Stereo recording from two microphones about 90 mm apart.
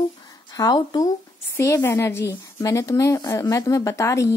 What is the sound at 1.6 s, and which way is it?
A woman's voice, 30° left (ahead or behind).